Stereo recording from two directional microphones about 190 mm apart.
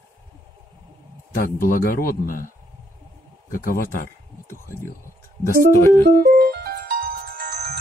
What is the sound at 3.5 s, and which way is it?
Speech, 45° left (ahead or behind).